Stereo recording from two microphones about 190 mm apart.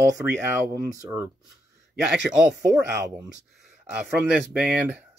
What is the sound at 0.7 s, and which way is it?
Speech, 15° right (ahead or behind).